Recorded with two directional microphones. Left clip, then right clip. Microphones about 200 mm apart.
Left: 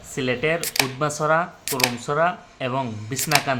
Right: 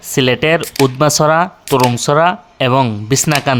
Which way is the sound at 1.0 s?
55° right (ahead or behind).